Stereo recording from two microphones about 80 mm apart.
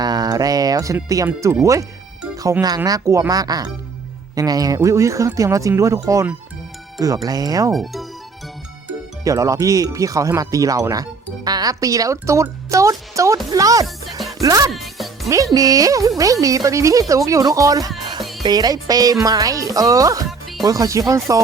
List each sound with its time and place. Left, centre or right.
0.0 s a sound: right
1.0 s speech: right
2.3 s speech: right
7.3 s speech: right
7.7 s speech: centre
9.2 s speech: right
13.5 s music: right
14.2 s music: centre
14.4 s speech: right
14.7 s music: centre
15.5 s speech: right
18.2 s music: centre
18.4 s speech: right